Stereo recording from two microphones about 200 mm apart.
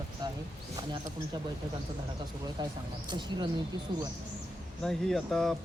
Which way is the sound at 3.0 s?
20° right (ahead or behind).